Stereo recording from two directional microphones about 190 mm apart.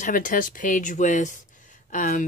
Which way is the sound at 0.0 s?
45° left (ahead or behind).